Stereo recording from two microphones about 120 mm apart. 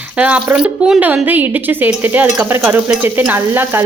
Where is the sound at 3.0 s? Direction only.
15° right (ahead or behind).